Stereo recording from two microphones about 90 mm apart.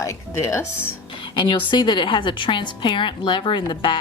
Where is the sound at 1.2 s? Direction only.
65° left (ahead or behind).